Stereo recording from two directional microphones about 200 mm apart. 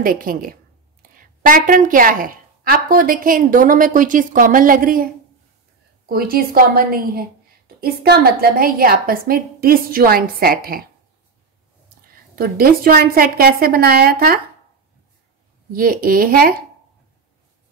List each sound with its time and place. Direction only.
0.0 s a woman's voice: 45° right (ahead or behind)
12.4 s a woman's voice: 45° right (ahead or behind)
15.7 s a woman's voice: 45° right (ahead or behind)